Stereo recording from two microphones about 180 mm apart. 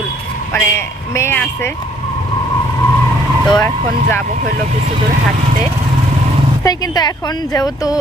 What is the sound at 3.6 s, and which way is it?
Speech, 10° left (ahead or behind).